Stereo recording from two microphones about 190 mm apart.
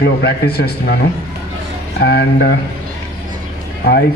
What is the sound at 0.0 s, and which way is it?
Speech, 60° left (ahead or behind).